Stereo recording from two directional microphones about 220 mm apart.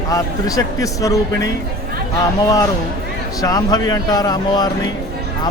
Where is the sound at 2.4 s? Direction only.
15° left (ahead or behind).